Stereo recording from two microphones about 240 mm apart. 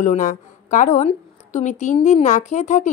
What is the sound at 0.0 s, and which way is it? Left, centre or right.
A woman's voice, left.